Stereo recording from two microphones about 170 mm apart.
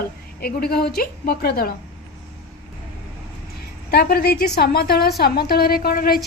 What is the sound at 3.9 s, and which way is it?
Speech, 65° left (ahead or behind).